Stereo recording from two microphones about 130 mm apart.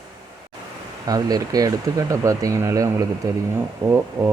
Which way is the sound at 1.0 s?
30° right (ahead or behind).